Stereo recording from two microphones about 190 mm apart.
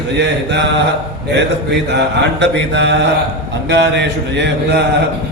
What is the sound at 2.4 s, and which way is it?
A man's voice, 65° right (ahead or behind).